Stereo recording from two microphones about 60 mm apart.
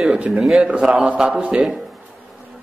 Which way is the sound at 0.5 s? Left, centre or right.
Centre.